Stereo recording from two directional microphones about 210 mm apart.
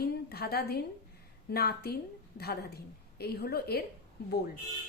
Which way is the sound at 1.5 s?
45° left (ahead or behind).